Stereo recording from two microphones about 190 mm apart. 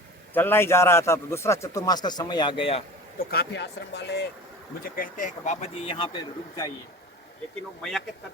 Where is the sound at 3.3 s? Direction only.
60° left (ahead or behind).